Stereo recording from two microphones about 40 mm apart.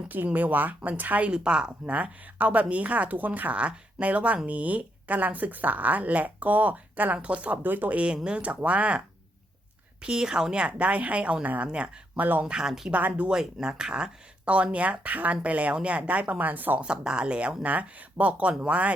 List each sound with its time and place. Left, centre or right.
0.3 s speech: right
1.3 s speech: right
1.9 s speech: right
7.6 s speech: right
7.9 s speech: right
8.4 s speech: right
10.0 s speech: centre
10.5 s speech: right
11.4 s speech: right
12.5 s speech: centre
12.9 s speech: right
13.3 s speech: centre
14.4 s speech: right
16.8 s speech: right